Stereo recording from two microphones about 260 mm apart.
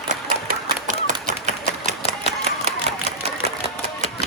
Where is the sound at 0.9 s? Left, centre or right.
Right.